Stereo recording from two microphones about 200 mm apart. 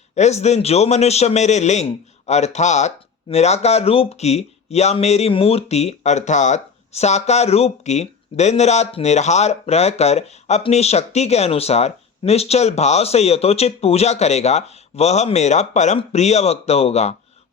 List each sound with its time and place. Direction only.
0.2 s a man's voice: 35° left (ahead or behind)